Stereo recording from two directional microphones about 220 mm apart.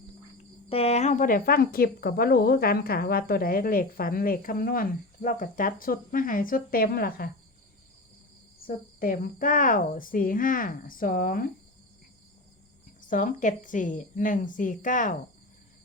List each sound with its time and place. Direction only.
0.7 s a woman's voice: 30° left (ahead or behind); by 7.3 s 45° left (ahead or behind)
8.6 s a woman's voice: 40° left (ahead or behind)
13.0 s a woman's voice: 35° left (ahead or behind)